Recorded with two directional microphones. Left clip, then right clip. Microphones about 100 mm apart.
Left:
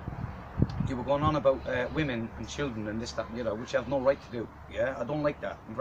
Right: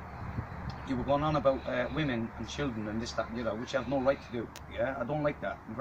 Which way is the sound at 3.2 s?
10° left (ahead or behind).